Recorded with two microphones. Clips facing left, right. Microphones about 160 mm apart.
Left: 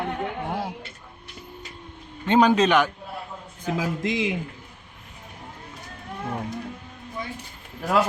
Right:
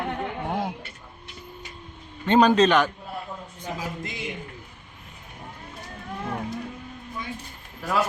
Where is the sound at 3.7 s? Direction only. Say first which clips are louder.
Left 10 dB; 90° left.